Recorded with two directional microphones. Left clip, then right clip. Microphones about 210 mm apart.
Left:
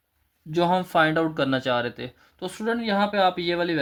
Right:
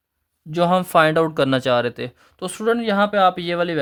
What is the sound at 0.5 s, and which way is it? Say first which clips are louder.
Speech: right 5 dB; 45° right (ahead or behind).